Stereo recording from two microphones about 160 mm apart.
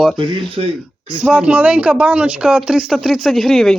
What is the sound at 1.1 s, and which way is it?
Speech, 5° right (ahead or behind).